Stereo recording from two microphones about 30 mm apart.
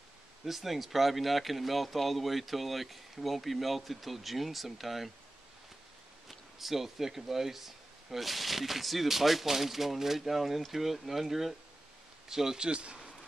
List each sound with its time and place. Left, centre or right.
0.5 s speech: centre
6.2 s speech: centre
12.5 s speech: right